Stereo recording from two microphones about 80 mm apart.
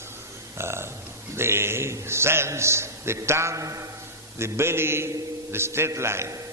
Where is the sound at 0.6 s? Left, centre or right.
Right.